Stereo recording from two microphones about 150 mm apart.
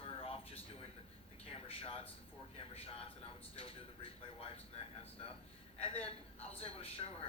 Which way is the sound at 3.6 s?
35° left (ahead or behind).